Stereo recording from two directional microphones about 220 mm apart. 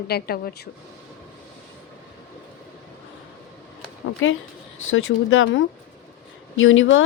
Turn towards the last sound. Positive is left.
turn(degrees=60)  # may be behind; listen again after turning